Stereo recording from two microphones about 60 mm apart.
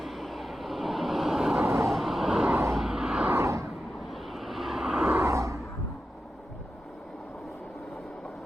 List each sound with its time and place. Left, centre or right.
0.0 s vehicle: centre
1.6 s vehicle: right
1.9 s vehicle: centre
3.3 s vehicle: right
4.1 s vehicle: centre
5.2 s a sound: right